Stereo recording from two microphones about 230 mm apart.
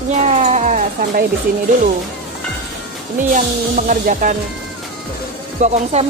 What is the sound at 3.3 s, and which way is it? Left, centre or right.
Speech, right.